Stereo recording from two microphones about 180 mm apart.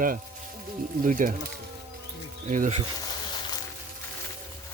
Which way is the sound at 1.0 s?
50° right (ahead or behind).